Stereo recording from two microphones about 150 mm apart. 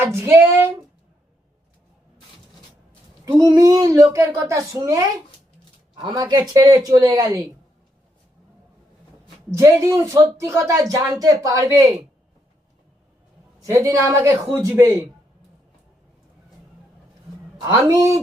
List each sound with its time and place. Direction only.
0.0 s speech: 15° right (ahead or behind)
3.3 s speech: 25° right (ahead or behind)
9.5 s speech: 20° right (ahead or behind)
13.6 s speech: 20° right (ahead or behind)
17.6 s speech: 20° right (ahead or behind)